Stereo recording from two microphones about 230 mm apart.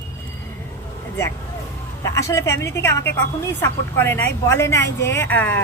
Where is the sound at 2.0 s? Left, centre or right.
Centre.